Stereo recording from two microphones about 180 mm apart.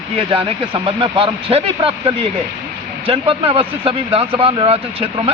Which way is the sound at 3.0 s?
30° right (ahead or behind).